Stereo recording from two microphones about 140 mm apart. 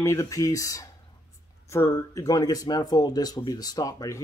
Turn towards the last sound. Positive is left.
turn(degrees=25)  # may be behind; listen again after turning